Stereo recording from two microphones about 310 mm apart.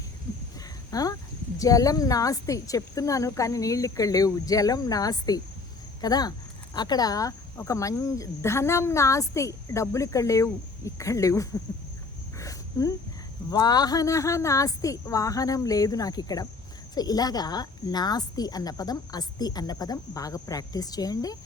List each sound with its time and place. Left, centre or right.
0.9 s speech: centre
12.4 s a sound: centre
13.5 s speech: centre